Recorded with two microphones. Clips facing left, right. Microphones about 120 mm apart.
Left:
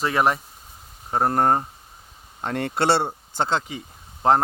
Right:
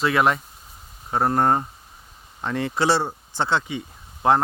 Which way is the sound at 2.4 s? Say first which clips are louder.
Even; 50° left (ahead or behind).